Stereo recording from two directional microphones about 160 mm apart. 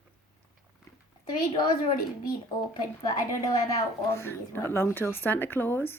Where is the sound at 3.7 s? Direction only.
15° left (ahead or behind).